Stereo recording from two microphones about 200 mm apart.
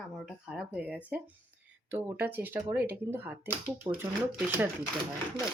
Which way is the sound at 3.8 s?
20° right (ahead or behind).